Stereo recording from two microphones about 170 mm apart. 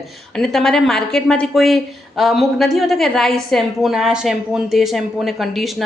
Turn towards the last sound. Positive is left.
turn(degrees=0)  # may be behind; listen again after turning